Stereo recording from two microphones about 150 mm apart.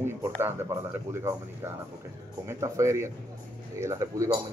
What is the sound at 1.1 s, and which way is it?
Speech, 15° right (ahead or behind).